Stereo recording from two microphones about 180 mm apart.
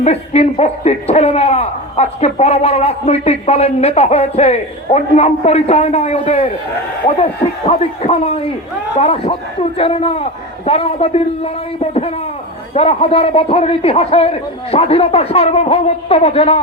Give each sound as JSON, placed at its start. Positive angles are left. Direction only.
{"t": 0.0, "sound": "a man's voice", "side_deg": 35}